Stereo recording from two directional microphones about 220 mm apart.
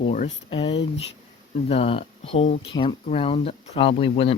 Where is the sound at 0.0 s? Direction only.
30° left (ahead or behind).